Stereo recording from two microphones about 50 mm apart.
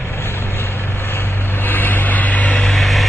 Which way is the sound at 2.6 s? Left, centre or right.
Centre.